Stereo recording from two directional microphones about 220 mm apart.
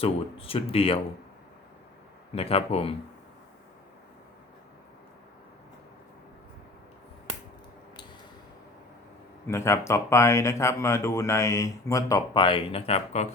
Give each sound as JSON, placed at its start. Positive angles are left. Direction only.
{"t": 0.0, "sound": "speech", "side_deg": 25}
{"t": 2.3, "sound": "speech", "side_deg": 25}
{"t": 9.5, "sound": "speech", "side_deg": 15}